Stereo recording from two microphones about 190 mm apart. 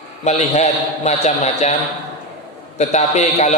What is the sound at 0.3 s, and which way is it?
A man's voice, 40° left (ahead or behind).